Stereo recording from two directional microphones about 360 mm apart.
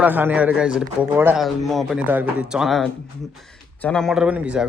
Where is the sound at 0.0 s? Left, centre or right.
Centre.